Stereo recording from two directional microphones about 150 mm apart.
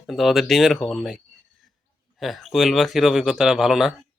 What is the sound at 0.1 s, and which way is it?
Speech, centre (ahead or behind).